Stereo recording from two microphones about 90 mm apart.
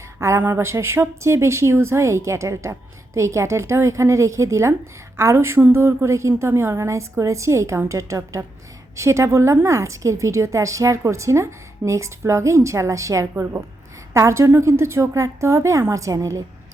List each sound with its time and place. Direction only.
0.2 s a woman's voice: 30° right (ahead or behind)
13.3 s a woman's voice: 25° right (ahead or behind)